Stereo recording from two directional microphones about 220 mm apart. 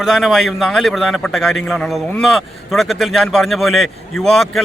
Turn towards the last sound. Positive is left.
turn(degrees=0)  # may be behind; listen again after turning